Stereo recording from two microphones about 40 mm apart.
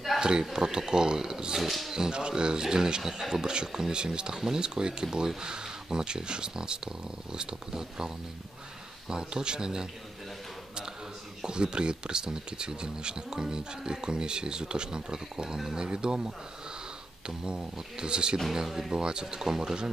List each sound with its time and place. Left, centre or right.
0.2 s speech: right
1.6 s speech: centre
1.9 s speech: centre
11.4 s speech: right
17.5 s speech: right
18.7 s speech: centre
18.9 s speech: centre